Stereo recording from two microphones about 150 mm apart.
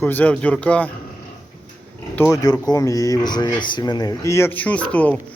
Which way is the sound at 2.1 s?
20° left (ahead or behind).